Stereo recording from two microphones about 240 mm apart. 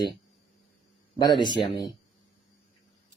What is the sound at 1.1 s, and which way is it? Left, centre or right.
Speech, centre.